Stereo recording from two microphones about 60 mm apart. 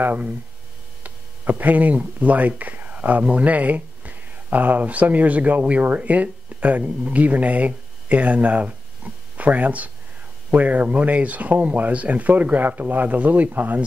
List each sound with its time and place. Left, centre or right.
0.0 s speech: right